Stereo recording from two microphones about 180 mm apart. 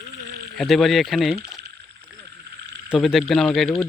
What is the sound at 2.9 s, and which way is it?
Speech, centre (ahead or behind).